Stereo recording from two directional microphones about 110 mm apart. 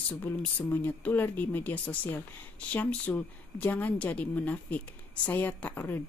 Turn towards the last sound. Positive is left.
turn(degrees=15)  # may be behind; listen again after turning